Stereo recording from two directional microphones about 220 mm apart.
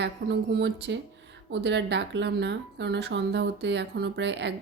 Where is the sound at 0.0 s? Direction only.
50° right (ahead or behind).